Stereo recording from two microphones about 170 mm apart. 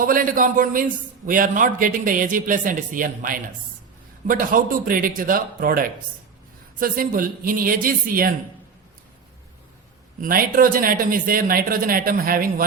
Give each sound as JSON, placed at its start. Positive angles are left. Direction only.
{"t": 0.0, "sound": "a man's voice", "side_deg": -55}
{"t": 10.2, "sound": "speech", "side_deg": -55}